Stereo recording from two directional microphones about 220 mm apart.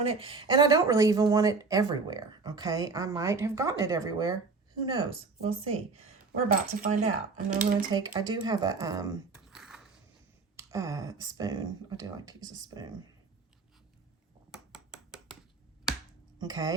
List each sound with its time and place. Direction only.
0.0 s speech: 25° right (ahead or behind)
6.5 s speech: 35° right (ahead or behind)
7.9 s speech: 20° right (ahead or behind)
9.5 s a sound: 5° right (ahead or behind)
10.6 s speech: 15° right (ahead or behind)
14.5 s a sound: centre (ahead or behind)
16.4 s speech: 15° right (ahead or behind)